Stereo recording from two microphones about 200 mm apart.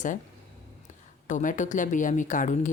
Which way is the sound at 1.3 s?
40° left (ahead or behind).